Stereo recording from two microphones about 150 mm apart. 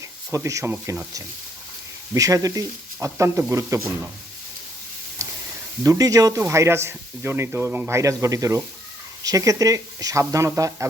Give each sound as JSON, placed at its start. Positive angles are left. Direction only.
{"t": 0.3, "sound": "speech", "side_deg": -20}
{"t": 5.8, "sound": "speech", "side_deg": -25}